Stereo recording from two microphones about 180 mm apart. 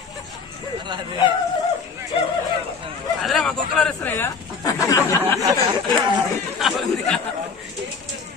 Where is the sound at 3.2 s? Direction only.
Centre (ahead or behind).